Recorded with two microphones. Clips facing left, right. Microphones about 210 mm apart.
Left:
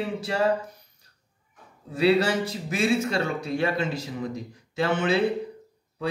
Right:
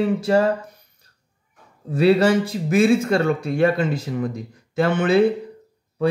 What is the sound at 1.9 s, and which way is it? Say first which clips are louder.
Speech: right 5 dB; 50° right (ahead or behind).